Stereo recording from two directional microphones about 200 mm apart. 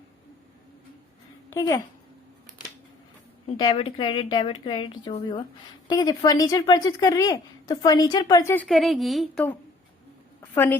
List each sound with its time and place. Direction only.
1.5 s a woman's voice: 15° left (ahead or behind)
3.6 s a woman's voice: 25° left (ahead or behind)
8.6 s a woman's voice: centre (ahead or behind)